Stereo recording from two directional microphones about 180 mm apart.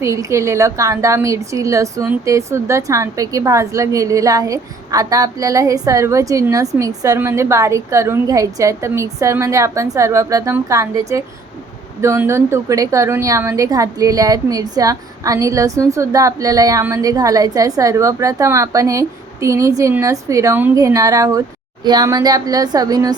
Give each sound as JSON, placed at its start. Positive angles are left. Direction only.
{"t": 0.0, "sound": "a woman's voice", "side_deg": -15}